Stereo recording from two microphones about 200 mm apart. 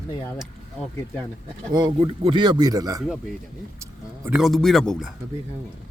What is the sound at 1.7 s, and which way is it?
A man's voice, 25° right (ahead or behind).